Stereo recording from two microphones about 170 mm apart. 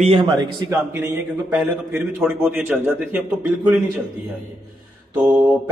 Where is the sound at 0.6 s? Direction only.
15° right (ahead or behind).